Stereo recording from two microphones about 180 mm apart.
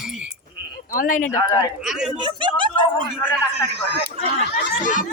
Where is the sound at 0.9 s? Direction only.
50° left (ahead or behind).